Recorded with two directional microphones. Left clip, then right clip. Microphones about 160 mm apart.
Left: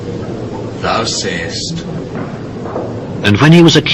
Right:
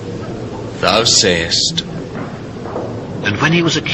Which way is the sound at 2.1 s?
25° right (ahead or behind).